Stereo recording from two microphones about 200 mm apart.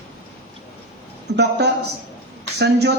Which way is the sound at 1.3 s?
55° right (ahead or behind).